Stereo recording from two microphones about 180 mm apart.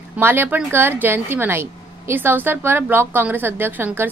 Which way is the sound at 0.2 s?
10° right (ahead or behind).